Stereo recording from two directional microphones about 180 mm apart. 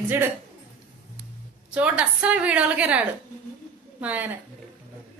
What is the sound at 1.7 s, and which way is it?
A woman's voice, 5° right (ahead or behind).